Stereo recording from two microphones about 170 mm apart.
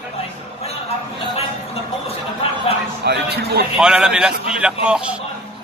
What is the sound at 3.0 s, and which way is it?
Speech, 70° right (ahead or behind).